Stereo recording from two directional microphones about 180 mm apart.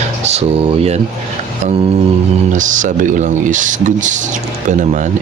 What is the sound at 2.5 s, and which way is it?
Speech, 45° right (ahead or behind).